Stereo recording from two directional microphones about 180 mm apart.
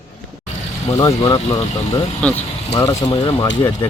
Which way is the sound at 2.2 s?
10° left (ahead or behind).